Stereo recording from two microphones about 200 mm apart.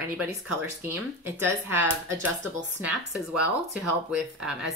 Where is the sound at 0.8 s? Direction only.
10° right (ahead or behind).